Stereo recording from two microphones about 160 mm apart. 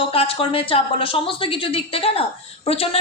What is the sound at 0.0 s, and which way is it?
A woman's voice, 35° left (ahead or behind).